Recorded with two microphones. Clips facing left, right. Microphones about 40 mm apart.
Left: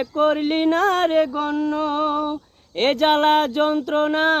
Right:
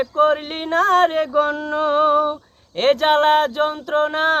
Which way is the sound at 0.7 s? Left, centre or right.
Left.